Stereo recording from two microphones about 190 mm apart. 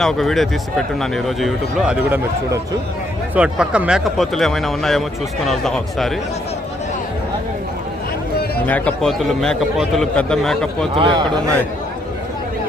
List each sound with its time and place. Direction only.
0.0 s a man's voice: centre (ahead or behind)
8.6 s a man's voice: 10° left (ahead or behind)
10.9 s a man's voice: 25° right (ahead or behind)